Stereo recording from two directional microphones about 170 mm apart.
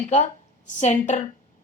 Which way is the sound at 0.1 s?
45° left (ahead or behind).